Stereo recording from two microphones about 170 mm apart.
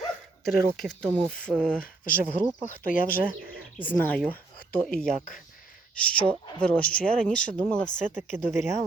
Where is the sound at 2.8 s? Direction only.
55° left (ahead or behind).